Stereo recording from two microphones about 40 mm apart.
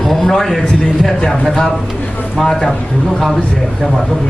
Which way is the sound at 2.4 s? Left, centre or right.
Centre.